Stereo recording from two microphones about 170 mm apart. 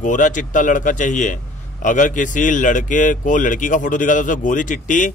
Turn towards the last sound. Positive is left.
turn(degrees=50)  # may be behind; listen again after turning